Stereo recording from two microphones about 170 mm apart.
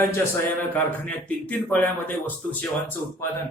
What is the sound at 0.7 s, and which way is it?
Speech, 10° left (ahead or behind).